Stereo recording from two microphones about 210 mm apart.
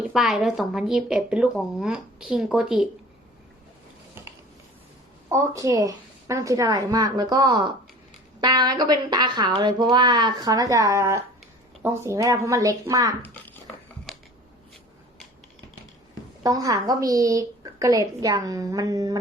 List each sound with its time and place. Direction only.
0.1 s speech: centre (ahead or behind)
5.3 s a woman's voice: 15° right (ahead or behind)
13.2 s speech: 10° left (ahead or behind)
16.4 s a woman's voice: 15° right (ahead or behind)